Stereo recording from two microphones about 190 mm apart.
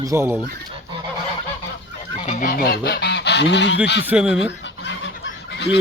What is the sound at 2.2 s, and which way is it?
Goose, 45° left (ahead or behind).